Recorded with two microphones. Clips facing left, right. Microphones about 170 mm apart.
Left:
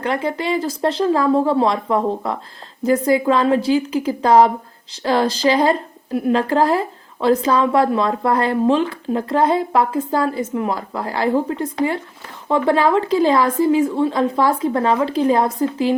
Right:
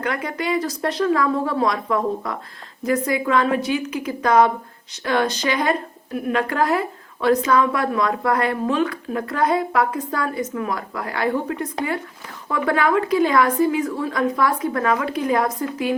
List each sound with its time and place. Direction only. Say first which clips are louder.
0.0 s a woman's voice: left 4 dB; 30° left (ahead or behind)